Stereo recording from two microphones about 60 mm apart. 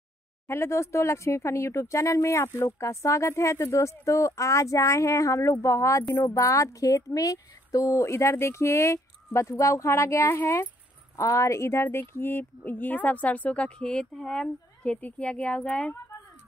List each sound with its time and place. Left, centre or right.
0.5 s a woman's voice: left
8.1 s speech: left
11.1 s speech: left